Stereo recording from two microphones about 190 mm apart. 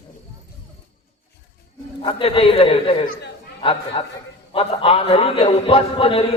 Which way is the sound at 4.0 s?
30° left (ahead or behind).